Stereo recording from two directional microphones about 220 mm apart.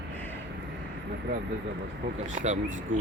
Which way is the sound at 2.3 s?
35° right (ahead or behind).